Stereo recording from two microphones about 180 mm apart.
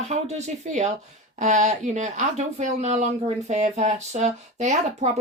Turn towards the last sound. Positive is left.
turn(degrees=-40)  # may be behind; listen again after turning